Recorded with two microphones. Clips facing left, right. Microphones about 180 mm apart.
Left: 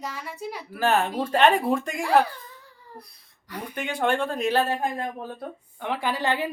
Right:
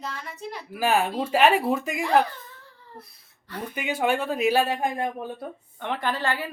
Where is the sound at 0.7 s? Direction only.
10° right (ahead or behind).